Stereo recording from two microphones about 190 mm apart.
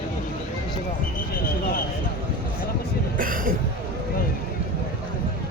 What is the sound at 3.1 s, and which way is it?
Speech, 45° right (ahead or behind).